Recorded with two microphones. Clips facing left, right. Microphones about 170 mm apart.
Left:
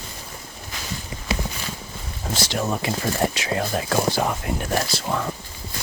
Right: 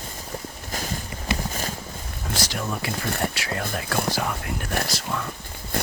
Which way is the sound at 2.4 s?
25° left (ahead or behind).